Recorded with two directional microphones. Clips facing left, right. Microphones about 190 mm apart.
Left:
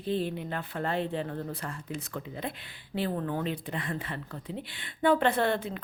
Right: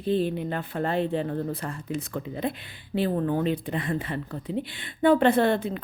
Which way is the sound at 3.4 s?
20° right (ahead or behind).